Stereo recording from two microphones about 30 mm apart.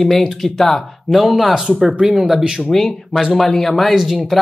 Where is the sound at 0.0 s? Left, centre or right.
Centre.